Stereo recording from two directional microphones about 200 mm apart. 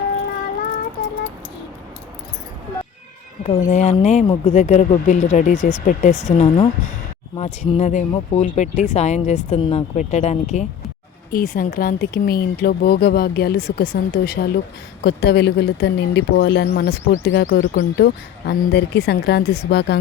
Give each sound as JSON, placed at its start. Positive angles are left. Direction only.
{"t": 1.0, "sound": "a sound", "side_deg": 50}
{"t": 3.4, "sound": "speech", "side_deg": 35}
{"t": 11.3, "sound": "speech", "side_deg": 45}